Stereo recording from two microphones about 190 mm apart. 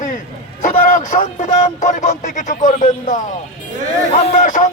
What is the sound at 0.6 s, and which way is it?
Speech, 40° left (ahead or behind).